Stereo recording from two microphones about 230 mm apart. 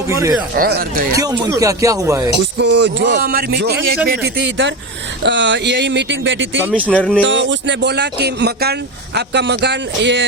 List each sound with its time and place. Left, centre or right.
0.1 s speech: centre
0.5 s speech: right
1.2 s speech: centre
2.6 s speech: right
6.9 s speech: centre
7.3 s speech: right